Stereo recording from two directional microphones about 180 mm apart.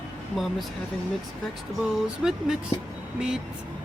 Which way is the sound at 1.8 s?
Centre (ahead or behind).